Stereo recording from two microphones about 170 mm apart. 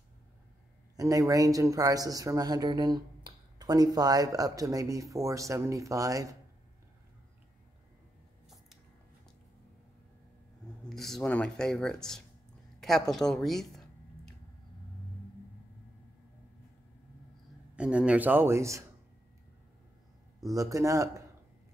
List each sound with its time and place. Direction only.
0.9 s speech: 20° right (ahead or behind)
10.9 s speech: centre (ahead or behind)
12.8 s a sound: centre (ahead or behind)
17.7 s speech: 5° right (ahead or behind)
20.4 s speech: 20° right (ahead or behind)